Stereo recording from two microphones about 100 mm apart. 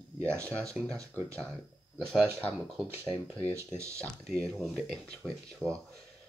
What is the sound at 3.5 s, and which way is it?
Speech, 30° right (ahead or behind).